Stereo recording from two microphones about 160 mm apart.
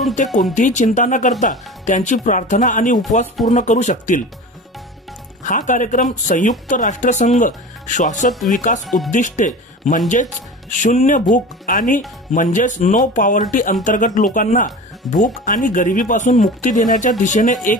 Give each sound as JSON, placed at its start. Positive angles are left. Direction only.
{"t": 0.6, "sound": "speech", "side_deg": 50}
{"t": 5.4, "sound": "speech", "side_deg": 50}
{"t": 8.3, "sound": "speech", "side_deg": 0}
{"t": 8.5, "sound": "speech", "side_deg": 50}
{"t": 8.8, "sound": "speech", "side_deg": 0}
{"t": 9.1, "sound": "speech", "side_deg": 50}